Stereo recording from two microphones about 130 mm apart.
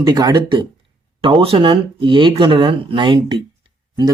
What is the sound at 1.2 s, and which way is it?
Speech, 45° right (ahead or behind).